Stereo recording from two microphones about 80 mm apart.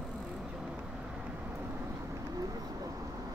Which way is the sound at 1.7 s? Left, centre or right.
Right.